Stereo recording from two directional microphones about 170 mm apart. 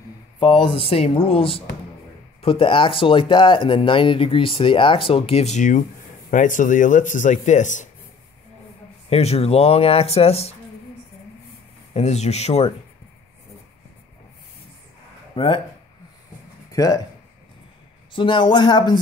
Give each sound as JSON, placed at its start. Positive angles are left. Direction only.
{"t": 0.4, "sound": "speech", "side_deg": 30}
{"t": 9.1, "sound": "speech", "side_deg": 35}
{"t": 11.9, "sound": "speech", "side_deg": 40}
{"t": 15.3, "sound": "speech", "side_deg": 30}
{"t": 16.7, "sound": "speech", "side_deg": 20}
{"t": 18.1, "sound": "speech", "side_deg": 30}